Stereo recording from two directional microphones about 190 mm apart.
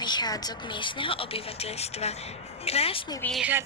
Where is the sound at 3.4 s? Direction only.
10° right (ahead or behind).